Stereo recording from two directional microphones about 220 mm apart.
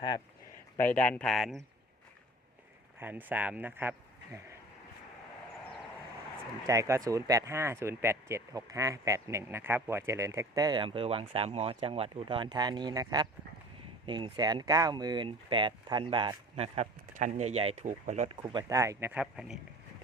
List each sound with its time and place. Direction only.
0.9 s speech: 5° left (ahead or behind)
3.0 s speech: 10° right (ahead or behind)
6.7 s speech: 15° right (ahead or behind); by 18.3 s 35° right (ahead or behind)
18.4 s speech: 15° right (ahead or behind)